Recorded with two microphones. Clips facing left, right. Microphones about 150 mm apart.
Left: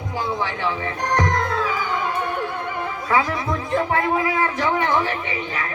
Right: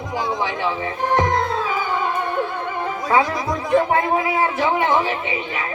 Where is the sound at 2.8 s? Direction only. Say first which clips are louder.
Right 3 dB; 20° right (ahead or behind).